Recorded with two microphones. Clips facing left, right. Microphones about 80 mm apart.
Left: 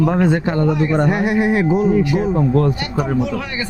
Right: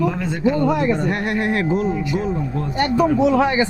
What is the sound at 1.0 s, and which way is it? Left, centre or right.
Speech, centre.